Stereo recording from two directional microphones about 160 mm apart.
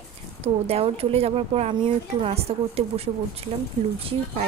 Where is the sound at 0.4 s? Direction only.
40° right (ahead or behind).